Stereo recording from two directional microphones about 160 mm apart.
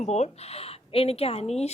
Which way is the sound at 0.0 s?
45° left (ahead or behind).